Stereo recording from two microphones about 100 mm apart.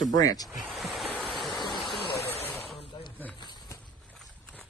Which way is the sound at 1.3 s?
Centre (ahead or behind).